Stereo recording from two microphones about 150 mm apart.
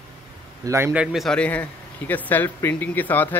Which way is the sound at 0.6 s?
15° right (ahead or behind).